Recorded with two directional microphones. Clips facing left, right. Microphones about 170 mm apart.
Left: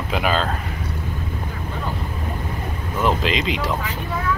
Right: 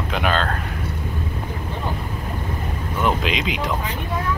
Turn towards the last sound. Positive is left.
turn(degrees=0)  # may be behind; listen again after turning